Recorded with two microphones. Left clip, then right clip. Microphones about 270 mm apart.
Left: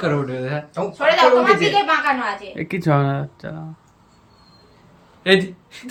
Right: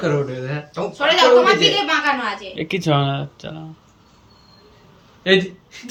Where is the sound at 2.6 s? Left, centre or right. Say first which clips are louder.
Right 1 dB; centre.